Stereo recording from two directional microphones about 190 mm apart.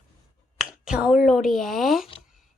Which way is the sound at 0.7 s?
5° right (ahead or behind).